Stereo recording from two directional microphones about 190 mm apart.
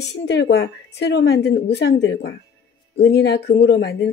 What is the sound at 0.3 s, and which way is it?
Speech, 65° left (ahead or behind).